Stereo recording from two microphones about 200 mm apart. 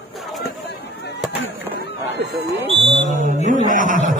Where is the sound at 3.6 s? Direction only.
40° right (ahead or behind).